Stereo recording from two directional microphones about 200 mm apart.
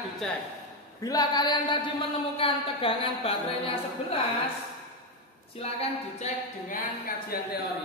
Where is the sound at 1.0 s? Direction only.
20° left (ahead or behind).